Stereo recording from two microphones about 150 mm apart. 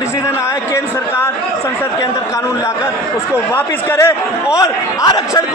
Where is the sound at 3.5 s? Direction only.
15° left (ahead or behind).